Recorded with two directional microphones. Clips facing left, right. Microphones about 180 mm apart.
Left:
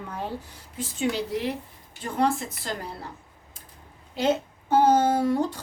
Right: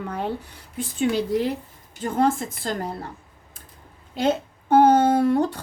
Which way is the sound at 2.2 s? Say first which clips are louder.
Right 3 dB; 50° right (ahead or behind).